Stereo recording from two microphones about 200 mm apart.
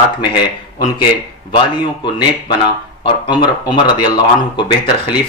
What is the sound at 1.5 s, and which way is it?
Speech, 25° left (ahead or behind).